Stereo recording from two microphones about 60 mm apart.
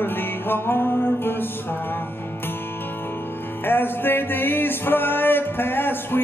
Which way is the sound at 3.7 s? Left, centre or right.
Left.